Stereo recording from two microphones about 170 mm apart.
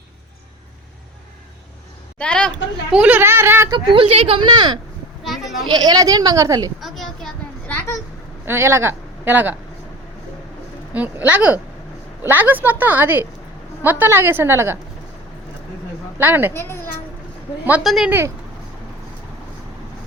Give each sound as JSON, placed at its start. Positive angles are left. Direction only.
{"t": 2.1, "sound": "a woman's voice", "side_deg": 5}
{"t": 2.9, "sound": "a woman's voice", "side_deg": -10}
{"t": 3.7, "sound": "a woman's voice", "side_deg": -25}
{"t": 5.2, "sound": "sheep", "side_deg": 0}
{"t": 5.6, "sound": "a woman's voice", "side_deg": -25}
{"t": 6.7, "sound": "a sound", "side_deg": 0}
{"t": 8.4, "sound": "speech", "side_deg": -15}
{"t": 10.9, "sound": "a woman's voice", "side_deg": -10}
{"t": 16.1, "sound": "a woman's voice", "side_deg": -10}
{"t": 16.6, "sound": "a woman's voice", "side_deg": 15}
{"t": 17.7, "sound": "a woman's voice", "side_deg": -5}